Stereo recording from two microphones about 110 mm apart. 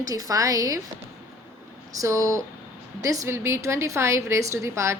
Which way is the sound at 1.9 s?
30° right (ahead or behind).